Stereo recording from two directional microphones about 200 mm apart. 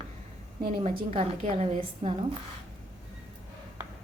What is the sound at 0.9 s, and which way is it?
A woman's voice, 30° right (ahead or behind).